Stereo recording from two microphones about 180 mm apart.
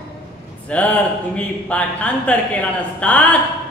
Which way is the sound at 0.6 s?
5° left (ahead or behind).